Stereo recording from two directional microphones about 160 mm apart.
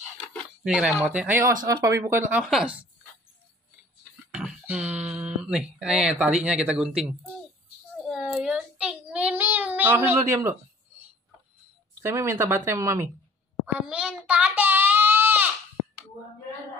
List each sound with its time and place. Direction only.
0.7 s speech: 5° right (ahead or behind)
2.4 s speech: 5° right (ahead or behind)
4.3 s speech: 5° right (ahead or behind)
8.0 s child singing: centre (ahead or behind); by 11.1 s 15° right (ahead or behind)
12.0 s speech: 15° right (ahead or behind)
13.7 s a sound: 5° right (ahead or behind)